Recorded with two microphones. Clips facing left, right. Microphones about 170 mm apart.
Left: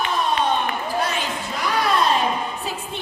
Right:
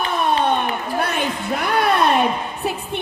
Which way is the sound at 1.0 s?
60° right (ahead or behind).